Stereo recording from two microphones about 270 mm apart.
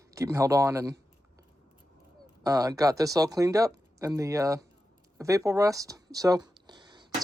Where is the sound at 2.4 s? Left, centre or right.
Centre.